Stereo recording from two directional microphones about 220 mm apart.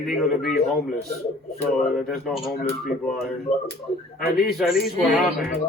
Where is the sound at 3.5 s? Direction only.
25° left (ahead or behind).